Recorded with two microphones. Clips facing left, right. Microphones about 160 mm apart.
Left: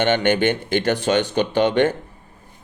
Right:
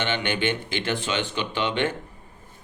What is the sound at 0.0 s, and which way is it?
Speech, 50° left (ahead or behind).